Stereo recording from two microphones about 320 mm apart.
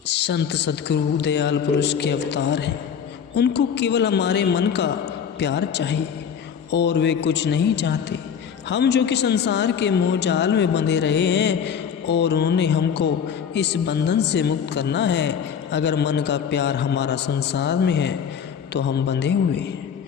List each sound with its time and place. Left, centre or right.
0.1 s speech: left